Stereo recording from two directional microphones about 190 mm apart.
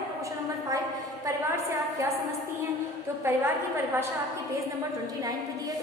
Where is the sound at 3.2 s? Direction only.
15° right (ahead or behind).